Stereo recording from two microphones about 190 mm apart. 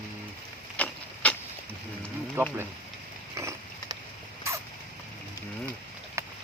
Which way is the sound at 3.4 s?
15° right (ahead or behind).